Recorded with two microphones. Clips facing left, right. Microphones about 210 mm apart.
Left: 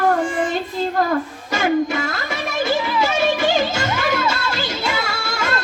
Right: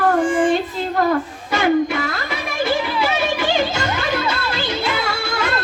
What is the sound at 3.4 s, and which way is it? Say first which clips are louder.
Music: left 1 dB; 45° left (ahead or behind).